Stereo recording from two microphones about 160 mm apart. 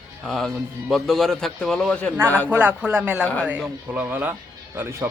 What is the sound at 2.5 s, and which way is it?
A man's voice, 10° right (ahead or behind).